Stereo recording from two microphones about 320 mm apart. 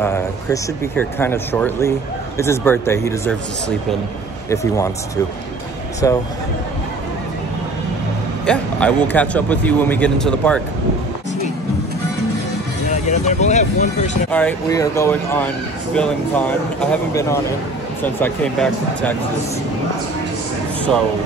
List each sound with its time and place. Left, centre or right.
0.0 s speech: centre
4.5 s speech: centre
8.5 s speech: centre
12.9 s speech: left
14.3 s speech: centre